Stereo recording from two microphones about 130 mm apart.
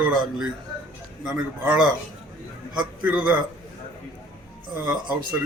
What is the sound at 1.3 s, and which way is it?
A man's voice, 10° right (ahead or behind).